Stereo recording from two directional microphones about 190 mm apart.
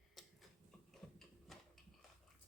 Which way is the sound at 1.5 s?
Centre (ahead or behind).